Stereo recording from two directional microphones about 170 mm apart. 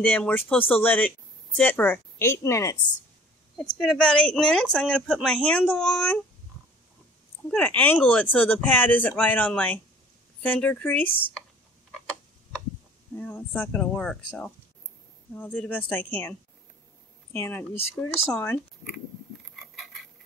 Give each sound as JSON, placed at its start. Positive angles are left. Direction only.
{"t": 0.0, "sound": "speech", "side_deg": 10}
{"t": 3.5, "sound": "speech", "side_deg": 5}
{"t": 7.4, "sound": "speech", "side_deg": 10}
{"t": 13.2, "sound": "speech", "side_deg": 10}
{"t": 19.5, "sound": "a sound", "side_deg": 0}